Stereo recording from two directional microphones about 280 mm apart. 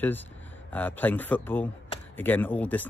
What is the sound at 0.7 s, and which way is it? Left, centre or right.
Speech, centre.